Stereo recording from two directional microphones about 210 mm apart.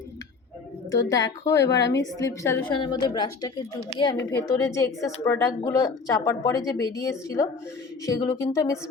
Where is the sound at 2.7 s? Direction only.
20° left (ahead or behind).